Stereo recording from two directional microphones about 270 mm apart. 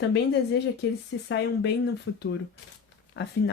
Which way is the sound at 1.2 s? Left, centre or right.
Left.